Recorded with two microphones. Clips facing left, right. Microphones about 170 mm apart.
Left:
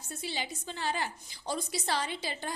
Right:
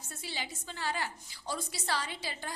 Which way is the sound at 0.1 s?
20° left (ahead or behind).